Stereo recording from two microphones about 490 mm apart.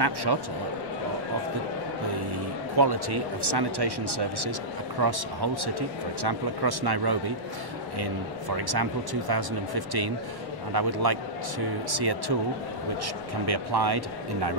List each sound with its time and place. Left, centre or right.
0.0 s speech: right
2.8 s speech: right